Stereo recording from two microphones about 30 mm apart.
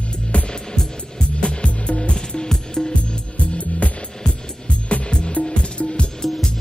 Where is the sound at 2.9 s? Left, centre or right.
Left.